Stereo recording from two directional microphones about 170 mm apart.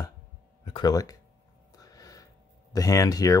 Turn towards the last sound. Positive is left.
turn(degrees=20)  # may be behind; listen again after turning